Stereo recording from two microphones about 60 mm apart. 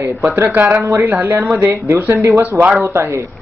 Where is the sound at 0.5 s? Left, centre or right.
Right.